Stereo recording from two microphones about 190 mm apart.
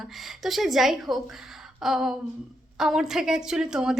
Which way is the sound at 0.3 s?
Centre (ahead or behind).